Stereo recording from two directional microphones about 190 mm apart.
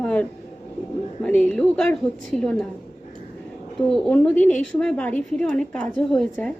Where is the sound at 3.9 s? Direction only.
5° left (ahead or behind).